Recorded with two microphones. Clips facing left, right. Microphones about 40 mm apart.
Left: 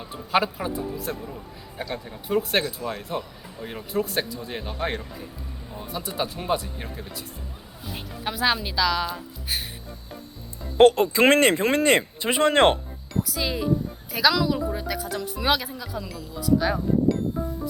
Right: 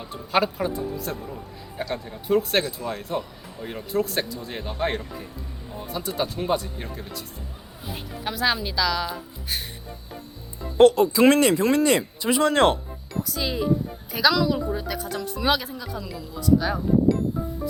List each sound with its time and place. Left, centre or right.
0.1 s speech: centre
10.8 s speech: left
13.2 s speech: centre